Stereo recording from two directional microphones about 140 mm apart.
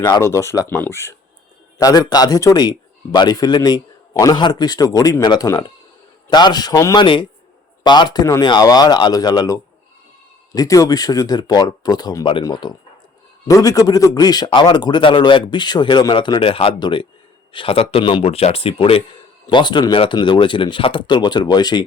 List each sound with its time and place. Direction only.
0.0 s a man's voice: 25° left (ahead or behind)